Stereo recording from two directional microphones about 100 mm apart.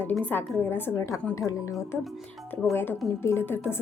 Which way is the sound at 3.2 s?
25° left (ahead or behind).